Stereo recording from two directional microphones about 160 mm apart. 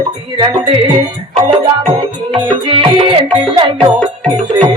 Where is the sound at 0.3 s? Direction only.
30° right (ahead or behind).